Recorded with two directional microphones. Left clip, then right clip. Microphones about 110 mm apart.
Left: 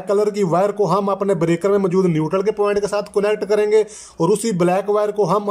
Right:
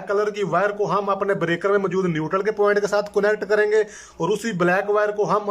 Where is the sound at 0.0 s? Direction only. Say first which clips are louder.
Left 4 dB; 45° left (ahead or behind).